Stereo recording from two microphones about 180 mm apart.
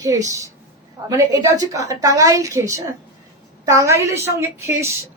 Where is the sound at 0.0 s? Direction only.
20° right (ahead or behind).